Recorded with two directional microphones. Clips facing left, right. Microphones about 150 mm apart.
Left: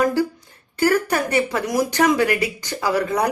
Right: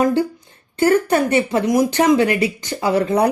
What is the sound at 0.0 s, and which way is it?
A woman's voice, 25° right (ahead or behind).